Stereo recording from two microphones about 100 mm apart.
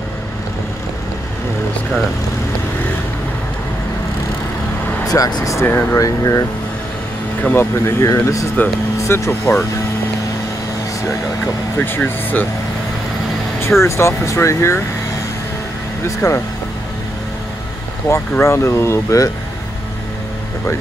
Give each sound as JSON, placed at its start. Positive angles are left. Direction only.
{"t": 5.0, "sound": "speech", "side_deg": 35}
{"t": 5.7, "sound": "speech", "side_deg": 20}
{"t": 5.9, "sound": "speech", "side_deg": 35}
{"t": 7.4, "sound": "speech", "side_deg": 25}
{"t": 11.1, "sound": "speech", "side_deg": 25}
{"t": 13.6, "sound": "speech", "side_deg": 25}
{"t": 16.2, "sound": "speech", "side_deg": 35}
{"t": 18.1, "sound": "speech", "side_deg": 25}